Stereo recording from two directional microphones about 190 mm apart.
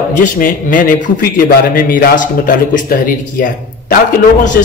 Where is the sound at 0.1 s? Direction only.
45° left (ahead or behind).